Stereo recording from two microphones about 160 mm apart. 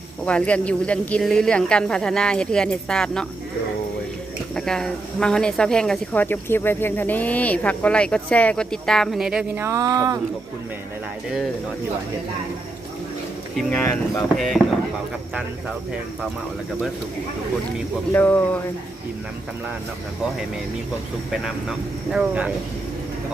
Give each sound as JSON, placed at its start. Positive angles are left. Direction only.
{"t": 0.3, "sound": "speech", "side_deg": 10}
{"t": 4.5, "sound": "speech", "side_deg": 5}
{"t": 9.6, "sound": "speech", "side_deg": -20}
{"t": 13.6, "sound": "speech", "side_deg": 10}
{"t": 14.3, "sound": "speech", "side_deg": 0}
{"t": 18.1, "sound": "speech", "side_deg": 10}
{"t": 21.4, "sound": "speech", "side_deg": -5}